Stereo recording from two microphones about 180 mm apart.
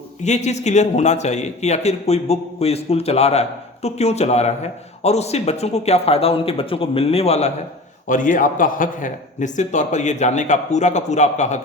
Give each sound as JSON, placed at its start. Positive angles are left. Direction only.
{"t": 0.2, "sound": "speech", "side_deg": 40}
{"t": 8.0, "sound": "speech", "side_deg": 45}